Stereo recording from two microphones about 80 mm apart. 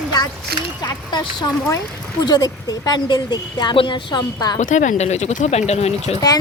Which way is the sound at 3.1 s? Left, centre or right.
Left.